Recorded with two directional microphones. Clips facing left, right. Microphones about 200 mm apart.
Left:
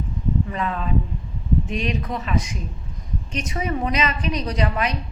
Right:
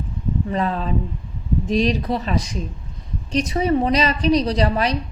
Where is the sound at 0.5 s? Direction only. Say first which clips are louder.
Right 3 dB; 35° right (ahead or behind).